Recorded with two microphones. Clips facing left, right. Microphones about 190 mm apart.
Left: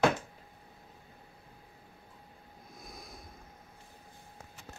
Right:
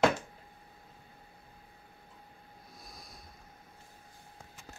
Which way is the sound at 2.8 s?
50° left (ahead or behind).